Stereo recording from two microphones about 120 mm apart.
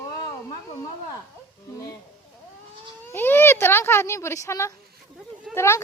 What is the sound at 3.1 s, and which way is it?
Speech, 15° left (ahead or behind).